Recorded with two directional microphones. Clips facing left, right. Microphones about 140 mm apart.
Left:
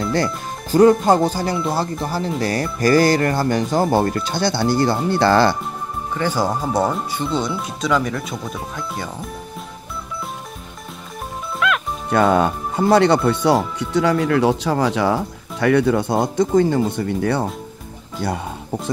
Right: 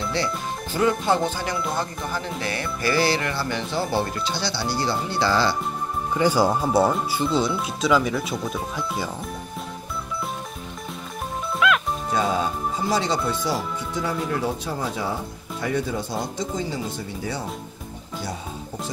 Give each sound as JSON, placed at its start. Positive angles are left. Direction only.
{"t": 0.1, "sound": "speech", "side_deg": 45}
{"t": 6.1, "sound": "speech", "side_deg": -10}
{"t": 11.6, "sound": "music", "side_deg": 0}
{"t": 12.1, "sound": "speech", "side_deg": 60}